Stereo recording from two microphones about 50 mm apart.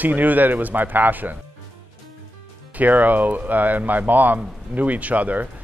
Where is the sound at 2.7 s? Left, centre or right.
Right.